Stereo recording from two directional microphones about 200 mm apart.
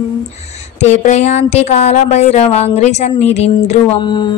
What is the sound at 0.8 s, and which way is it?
A woman's voice, 35° left (ahead or behind).